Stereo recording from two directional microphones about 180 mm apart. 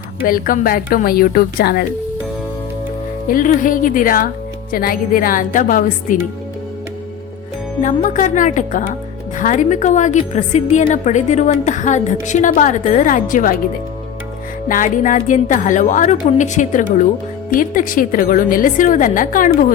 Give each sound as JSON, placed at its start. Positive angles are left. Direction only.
{"t": 0.2, "sound": "a woman's voice", "side_deg": 50}
{"t": 3.2, "sound": "a woman's voice", "side_deg": 50}
{"t": 7.8, "sound": "a woman's voice", "side_deg": 45}
{"t": 14.7, "sound": "a woman's voice", "side_deg": 45}